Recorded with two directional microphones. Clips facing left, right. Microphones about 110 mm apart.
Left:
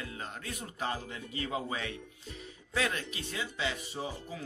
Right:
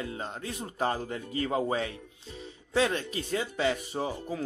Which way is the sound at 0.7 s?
40° right (ahead or behind).